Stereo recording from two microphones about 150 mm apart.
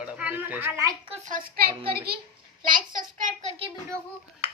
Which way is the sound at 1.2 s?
70° right (ahead or behind).